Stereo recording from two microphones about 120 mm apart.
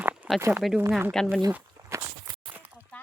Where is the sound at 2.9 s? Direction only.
10° left (ahead or behind).